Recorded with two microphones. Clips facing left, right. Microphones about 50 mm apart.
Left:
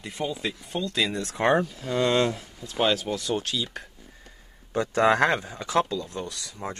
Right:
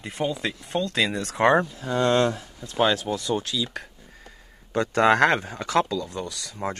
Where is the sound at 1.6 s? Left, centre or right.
Centre.